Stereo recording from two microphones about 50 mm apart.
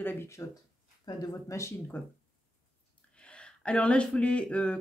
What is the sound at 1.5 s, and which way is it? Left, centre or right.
Speech, left.